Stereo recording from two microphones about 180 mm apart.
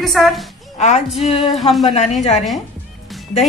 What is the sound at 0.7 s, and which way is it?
Speech, 40° left (ahead or behind).